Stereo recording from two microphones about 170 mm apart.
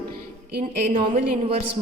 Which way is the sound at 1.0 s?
30° right (ahead or behind).